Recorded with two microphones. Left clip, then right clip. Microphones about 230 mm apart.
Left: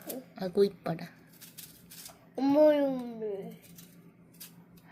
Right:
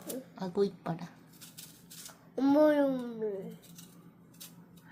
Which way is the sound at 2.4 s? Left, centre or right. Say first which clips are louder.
Left 2 dB; centre.